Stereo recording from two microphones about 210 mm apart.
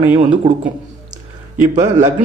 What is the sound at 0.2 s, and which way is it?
Speech, 25° right (ahead or behind).